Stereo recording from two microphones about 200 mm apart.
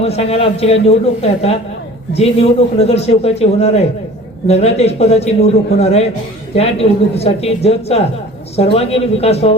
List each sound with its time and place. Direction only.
0.0 s a man's voice: 30° left (ahead or behind)